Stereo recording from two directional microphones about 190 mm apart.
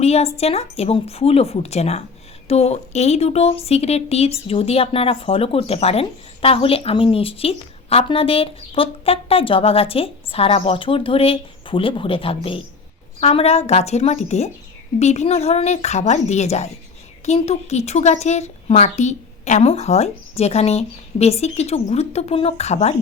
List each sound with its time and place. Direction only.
0.0 s a woman's voice: 35° left (ahead or behind)